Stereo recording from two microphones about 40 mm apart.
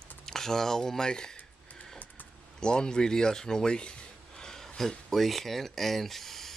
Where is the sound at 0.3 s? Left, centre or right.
Centre.